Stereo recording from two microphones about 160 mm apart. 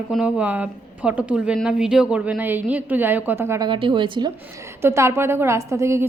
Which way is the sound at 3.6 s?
30° right (ahead or behind).